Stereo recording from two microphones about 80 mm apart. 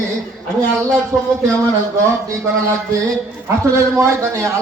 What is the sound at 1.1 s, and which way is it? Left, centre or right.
Speech, right.